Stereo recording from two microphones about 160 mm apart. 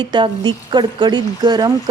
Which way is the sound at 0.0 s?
30° right (ahead or behind).